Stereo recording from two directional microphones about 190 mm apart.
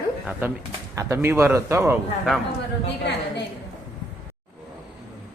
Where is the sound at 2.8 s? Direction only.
60° left (ahead or behind).